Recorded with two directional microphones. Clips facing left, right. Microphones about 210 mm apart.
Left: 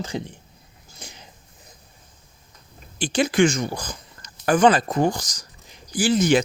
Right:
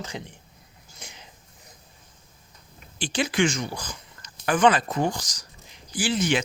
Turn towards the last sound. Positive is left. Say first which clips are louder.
# left 6 dB
turn(degrees=40)  # may be behind; listen again after turning